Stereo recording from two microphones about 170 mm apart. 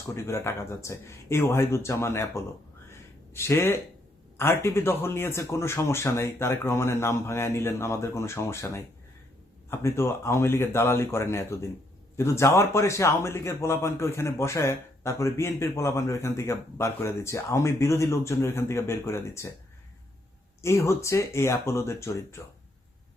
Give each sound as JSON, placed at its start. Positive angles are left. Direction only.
{"t": 0.1, "sound": "a man's voice", "side_deg": 15}
{"t": 2.9, "sound": "a sound", "side_deg": 15}
{"t": 4.4, "sound": "a man's voice", "side_deg": 15}
{"t": 20.6, "sound": "a man's voice", "side_deg": 15}